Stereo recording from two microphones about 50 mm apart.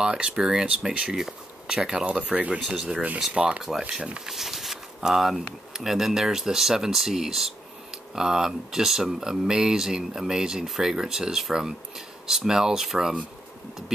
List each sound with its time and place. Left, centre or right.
0.0 s speech: centre
2.1 s speech: right
4.3 s speech: centre